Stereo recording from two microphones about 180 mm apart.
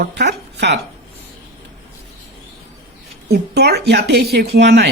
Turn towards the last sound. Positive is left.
turn(degrees=-65)  # may be behind; listen again after turning